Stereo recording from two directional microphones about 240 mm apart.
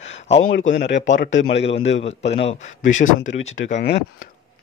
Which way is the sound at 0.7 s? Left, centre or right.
Left.